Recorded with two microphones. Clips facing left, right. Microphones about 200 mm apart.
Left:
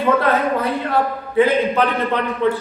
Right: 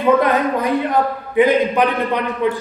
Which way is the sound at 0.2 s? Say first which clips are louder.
Right 1 dB; 15° right (ahead or behind).